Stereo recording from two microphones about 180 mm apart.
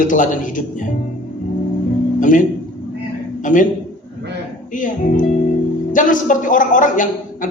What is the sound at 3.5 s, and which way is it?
Speech, 45° left (ahead or behind).